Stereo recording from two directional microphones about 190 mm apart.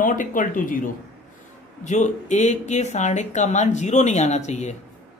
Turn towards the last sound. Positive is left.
turn(degrees=35)  # may be behind; listen again after turning